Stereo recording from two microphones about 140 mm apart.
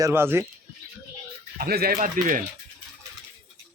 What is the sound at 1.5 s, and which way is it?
Speech, 90° right.